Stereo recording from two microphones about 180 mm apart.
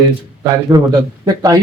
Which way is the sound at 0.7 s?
20° right (ahead or behind).